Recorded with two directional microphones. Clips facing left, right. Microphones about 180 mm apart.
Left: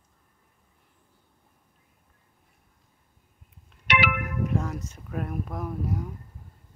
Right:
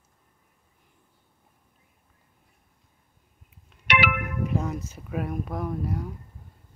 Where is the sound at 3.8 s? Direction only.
65° right (ahead or behind).